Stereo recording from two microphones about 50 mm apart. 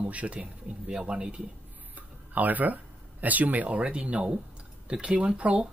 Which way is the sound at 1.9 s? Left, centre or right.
Right.